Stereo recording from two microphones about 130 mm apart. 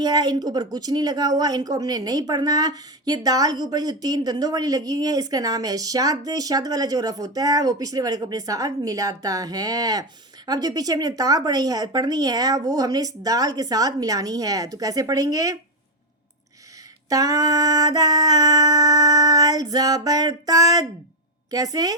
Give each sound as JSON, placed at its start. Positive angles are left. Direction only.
{"t": 0.0, "sound": "speech", "side_deg": -30}
{"t": 17.1, "sound": "speech", "side_deg": -30}